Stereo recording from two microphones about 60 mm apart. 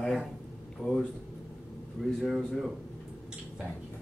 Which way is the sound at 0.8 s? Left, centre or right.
Right.